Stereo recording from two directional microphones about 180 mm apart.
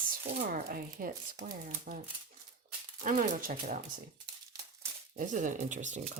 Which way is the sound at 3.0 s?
45° right (ahead or behind).